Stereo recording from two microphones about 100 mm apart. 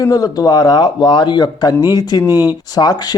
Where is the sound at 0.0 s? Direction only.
35° left (ahead or behind).